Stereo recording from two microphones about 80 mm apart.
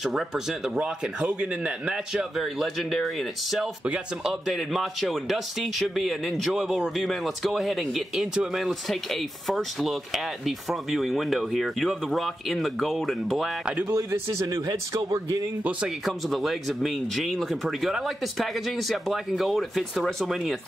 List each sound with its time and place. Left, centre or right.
0.0 s a man's voice: centre
2.6 s speech: centre
3.8 s speech: centre
14.5 s speech: right
16.1 s speech: centre